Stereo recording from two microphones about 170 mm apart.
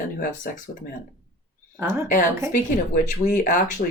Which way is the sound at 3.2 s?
50° left (ahead or behind).